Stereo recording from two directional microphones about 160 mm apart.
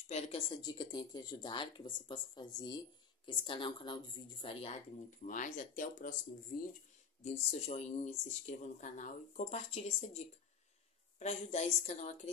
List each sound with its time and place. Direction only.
0.1 s a woman's voice: 35° left (ahead or behind)
5.2 s speech: 55° left (ahead or behind)
7.5 s speech: 45° left (ahead or behind)